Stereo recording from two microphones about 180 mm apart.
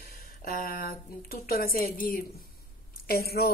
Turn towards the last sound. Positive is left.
turn(degrees=60)  # may be behind; listen again after turning